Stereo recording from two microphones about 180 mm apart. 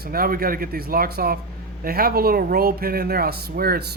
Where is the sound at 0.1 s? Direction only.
55° right (ahead or behind).